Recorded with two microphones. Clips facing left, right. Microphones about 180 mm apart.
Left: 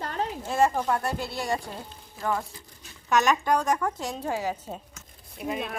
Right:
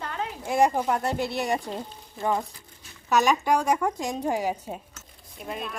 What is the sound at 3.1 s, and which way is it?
A woman's voice, 10° right (ahead or behind).